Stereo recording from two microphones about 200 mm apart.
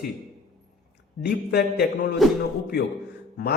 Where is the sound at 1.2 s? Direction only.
55° left (ahead or behind).